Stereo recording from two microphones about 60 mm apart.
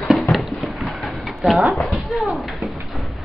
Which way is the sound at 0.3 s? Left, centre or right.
Centre.